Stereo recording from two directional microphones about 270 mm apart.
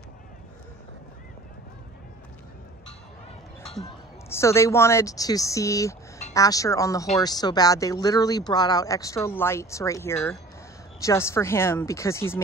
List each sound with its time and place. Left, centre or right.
4.3 s speech: centre